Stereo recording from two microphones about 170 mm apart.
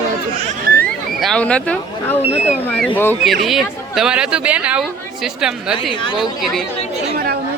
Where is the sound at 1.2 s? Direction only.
5° left (ahead or behind).